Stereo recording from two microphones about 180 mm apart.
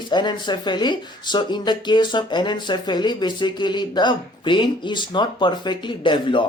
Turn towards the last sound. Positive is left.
turn(degrees=25)  # may be behind; listen again after turning